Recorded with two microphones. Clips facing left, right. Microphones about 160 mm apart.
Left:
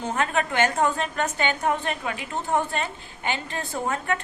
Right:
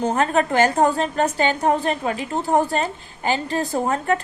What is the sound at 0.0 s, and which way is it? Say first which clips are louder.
A woman's voice: right 6 dB; 40° right (ahead or behind).